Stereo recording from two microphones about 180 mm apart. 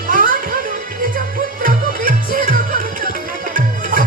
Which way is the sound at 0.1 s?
50° right (ahead or behind).